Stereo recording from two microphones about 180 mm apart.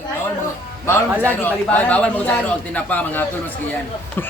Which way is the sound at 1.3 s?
10° left (ahead or behind).